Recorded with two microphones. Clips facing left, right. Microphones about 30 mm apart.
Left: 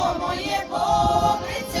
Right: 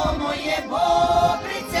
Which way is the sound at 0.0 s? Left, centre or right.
Right.